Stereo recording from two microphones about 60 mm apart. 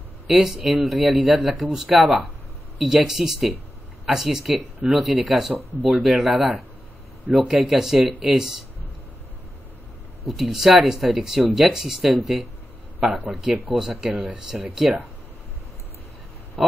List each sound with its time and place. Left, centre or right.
0.3 s speech: centre
10.2 s speech: centre
14.1 s speech: right
14.8 s speech: centre
16.6 s a sound: centre